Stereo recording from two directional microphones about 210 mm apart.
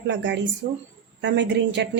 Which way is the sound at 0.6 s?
45° right (ahead or behind).